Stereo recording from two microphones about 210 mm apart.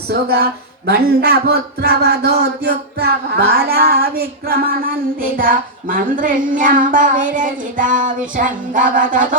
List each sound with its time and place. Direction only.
0.1 s speech: 50° right (ahead or behind)